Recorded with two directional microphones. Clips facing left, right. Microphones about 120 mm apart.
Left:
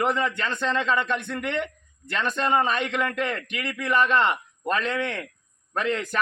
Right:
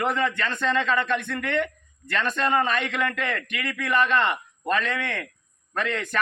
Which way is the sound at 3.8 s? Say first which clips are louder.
Left 1 dB; centre (ahead or behind).